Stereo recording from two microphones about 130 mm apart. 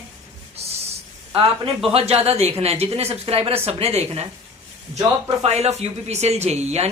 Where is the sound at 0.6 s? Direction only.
50° right (ahead or behind).